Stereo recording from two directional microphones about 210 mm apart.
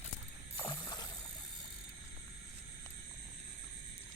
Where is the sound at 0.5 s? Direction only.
20° left (ahead or behind).